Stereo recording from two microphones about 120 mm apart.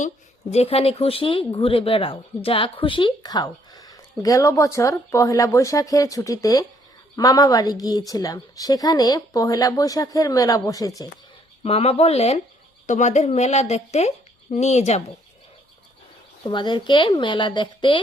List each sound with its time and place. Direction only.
0.5 s speech: 55° left (ahead or behind); by 11.1 s 30° left (ahead or behind)
11.6 s speech: 55° left (ahead or behind)
12.9 s speech: 80° left
16.4 s speech: 40° left (ahead or behind)